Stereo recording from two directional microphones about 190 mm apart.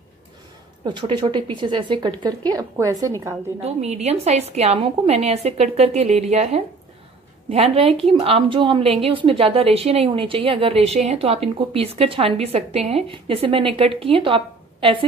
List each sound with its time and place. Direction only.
0.8 s a woman's voice: 25° right (ahead or behind)
3.6 s a woman's voice: 35° right (ahead or behind)